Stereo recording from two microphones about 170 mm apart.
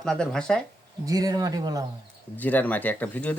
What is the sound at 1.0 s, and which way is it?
Speech, 20° right (ahead or behind).